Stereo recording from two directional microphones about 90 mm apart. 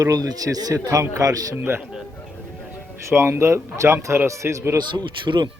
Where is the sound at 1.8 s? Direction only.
5° right (ahead or behind).